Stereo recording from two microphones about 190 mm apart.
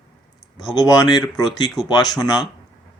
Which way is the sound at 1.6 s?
Centre (ahead or behind).